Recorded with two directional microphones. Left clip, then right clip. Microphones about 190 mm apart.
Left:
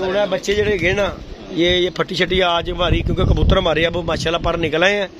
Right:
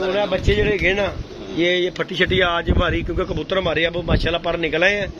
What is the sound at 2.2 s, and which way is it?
Speech, 25° left (ahead or behind).